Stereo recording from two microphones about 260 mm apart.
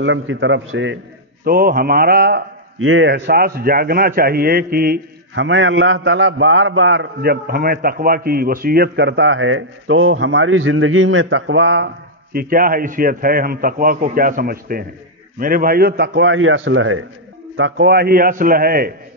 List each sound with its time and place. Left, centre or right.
0.0 s a man's voice: right
1.4 s a man's voice: right